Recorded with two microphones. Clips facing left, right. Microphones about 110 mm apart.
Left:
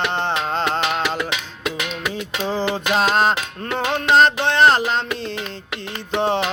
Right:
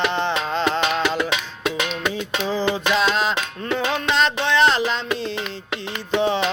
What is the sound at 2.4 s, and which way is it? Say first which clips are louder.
Music: left 1 dB; 55° left (ahead or behind).